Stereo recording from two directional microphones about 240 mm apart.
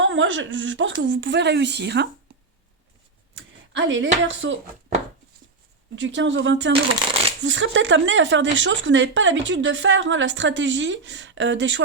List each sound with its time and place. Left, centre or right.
0.0 s speech: right
3.3 s speech: right
6.0 s speech: right